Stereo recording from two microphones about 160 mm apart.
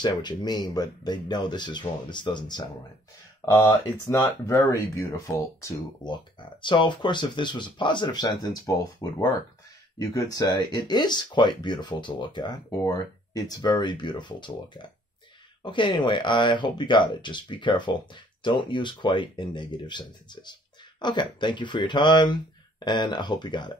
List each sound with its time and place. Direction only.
0.0 s speech: 25° left (ahead or behind)
3.5 s speech: 15° left (ahead or behind)